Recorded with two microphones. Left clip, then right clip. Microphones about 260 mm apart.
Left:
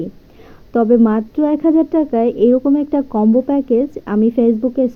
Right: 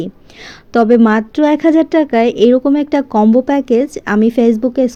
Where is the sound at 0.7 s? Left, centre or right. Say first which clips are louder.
Right 3 dB; right.